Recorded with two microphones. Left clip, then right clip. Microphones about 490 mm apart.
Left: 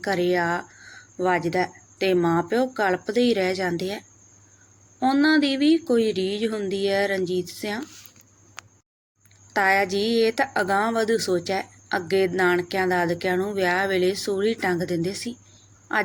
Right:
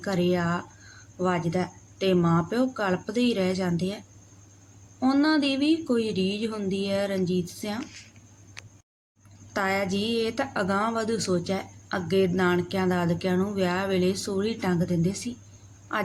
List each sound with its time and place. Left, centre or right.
0.0 s speech: right
9.5 s speech: right